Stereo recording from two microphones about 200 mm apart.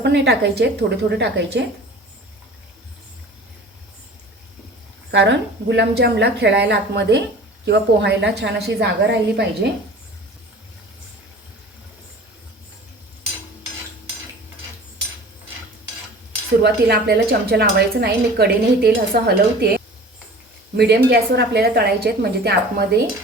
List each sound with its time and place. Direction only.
0.0 s speech: 55° right (ahead or behind)
5.1 s speech: 60° right (ahead or behind)
16.6 s speech: 55° right (ahead or behind)
20.7 s speech: 55° right (ahead or behind)